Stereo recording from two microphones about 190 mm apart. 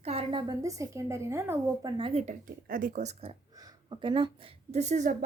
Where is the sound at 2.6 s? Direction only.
45° right (ahead or behind); by 4.3 s 25° right (ahead or behind).